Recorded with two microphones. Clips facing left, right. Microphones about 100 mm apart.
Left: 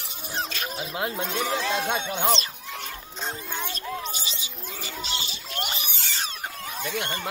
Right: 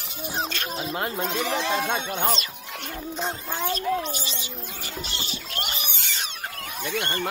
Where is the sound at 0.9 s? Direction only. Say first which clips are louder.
Right 1 dB; centre (ahead or behind).